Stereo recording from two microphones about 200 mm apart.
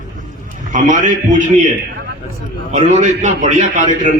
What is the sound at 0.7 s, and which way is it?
Speech, 40° right (ahead or behind).